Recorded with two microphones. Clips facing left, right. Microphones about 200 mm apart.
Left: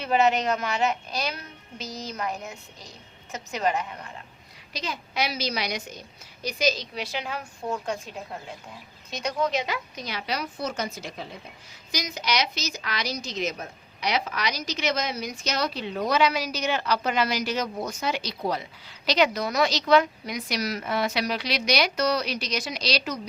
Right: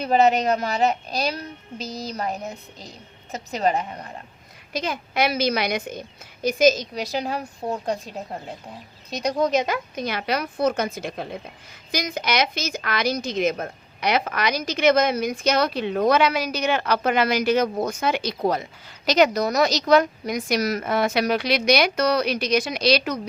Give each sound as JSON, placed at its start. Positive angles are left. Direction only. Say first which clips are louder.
{"t": 0.0, "sound": "a woman's voice", "louder": "right 4 dB", "side_deg": -35}
{"t": 4.7, "sound": "a woman's voice", "louder": "right 6 dB", "side_deg": -50}